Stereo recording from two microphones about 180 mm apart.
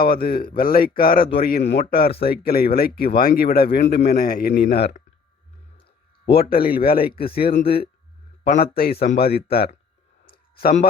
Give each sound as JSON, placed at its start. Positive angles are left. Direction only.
{"t": 0.0, "sound": "speech", "side_deg": 55}
{"t": 1.6, "sound": "speech", "side_deg": 40}
{"t": 1.9, "sound": "speech", "side_deg": 60}
{"t": 6.2, "sound": "speech", "side_deg": 55}
{"t": 10.6, "sound": "speech", "side_deg": 45}